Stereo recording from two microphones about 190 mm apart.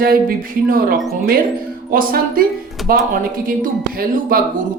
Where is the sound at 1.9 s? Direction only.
50° right (ahead or behind).